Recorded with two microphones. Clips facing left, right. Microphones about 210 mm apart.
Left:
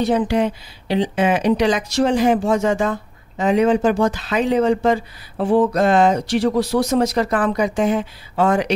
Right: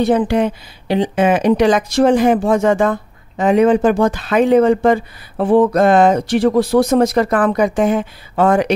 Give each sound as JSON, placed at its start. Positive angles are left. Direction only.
{"t": 0.0, "sound": "a woman's voice", "side_deg": -55}